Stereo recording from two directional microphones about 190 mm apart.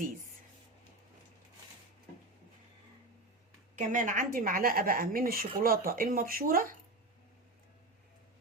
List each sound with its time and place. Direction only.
3.8 s speech: 40° right (ahead or behind)